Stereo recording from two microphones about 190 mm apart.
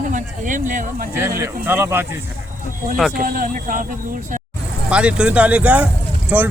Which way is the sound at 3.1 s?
50° right (ahead or behind).